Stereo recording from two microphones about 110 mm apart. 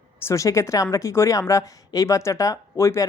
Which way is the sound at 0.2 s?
25° left (ahead or behind).